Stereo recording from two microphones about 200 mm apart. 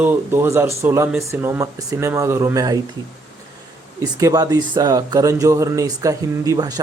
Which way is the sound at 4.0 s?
15° right (ahead or behind).